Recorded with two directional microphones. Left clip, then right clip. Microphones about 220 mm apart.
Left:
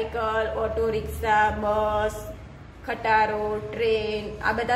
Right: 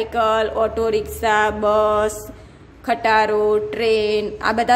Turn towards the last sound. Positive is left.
turn(degrees=-50)  # may be behind; listen again after turning